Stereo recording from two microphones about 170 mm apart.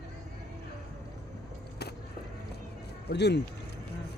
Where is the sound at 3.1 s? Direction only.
90° left.